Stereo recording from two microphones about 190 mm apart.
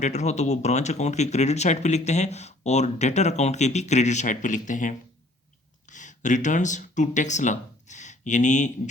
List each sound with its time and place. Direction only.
0.0 s speech: 35° left (ahead or behind)